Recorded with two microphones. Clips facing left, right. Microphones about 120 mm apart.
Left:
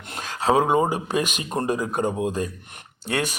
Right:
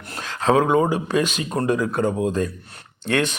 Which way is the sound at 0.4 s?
15° left (ahead or behind).